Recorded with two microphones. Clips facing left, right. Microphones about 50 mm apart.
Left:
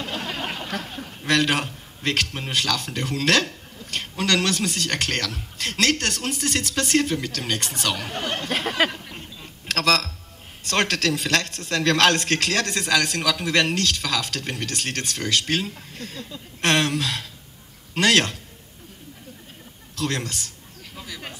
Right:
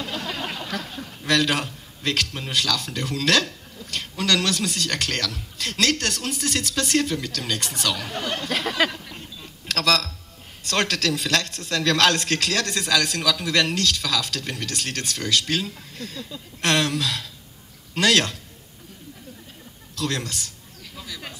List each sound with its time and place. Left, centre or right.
0.0 s a man's voice: centre
7.0 s speech: left
7.6 s speech: centre
8.1 s a sound: centre
10.7 s speech: centre
20.0 s speech: centre
20.9 s a sound: left